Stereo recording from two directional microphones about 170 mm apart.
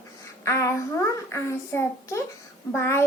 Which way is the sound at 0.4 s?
15° left (ahead or behind).